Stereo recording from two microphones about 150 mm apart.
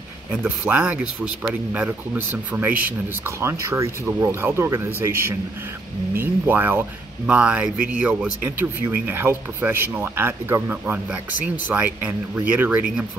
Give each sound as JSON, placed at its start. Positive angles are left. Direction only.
{"t": 0.3, "sound": "speech", "side_deg": -10}